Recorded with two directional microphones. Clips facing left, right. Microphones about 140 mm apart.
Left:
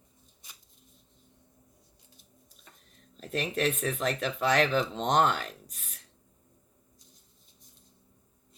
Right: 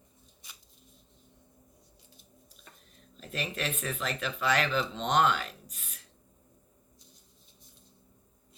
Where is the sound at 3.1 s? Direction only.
55° left (ahead or behind).